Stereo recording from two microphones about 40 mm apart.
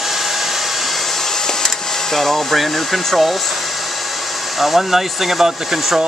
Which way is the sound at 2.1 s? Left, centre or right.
Centre.